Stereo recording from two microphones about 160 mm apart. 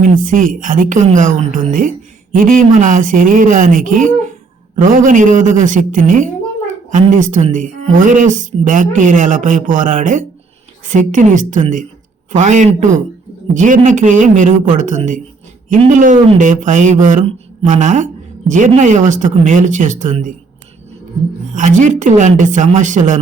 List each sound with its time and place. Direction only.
0.0 s a woman's voice: 55° right (ahead or behind)
21.5 s speech: 50° right (ahead or behind)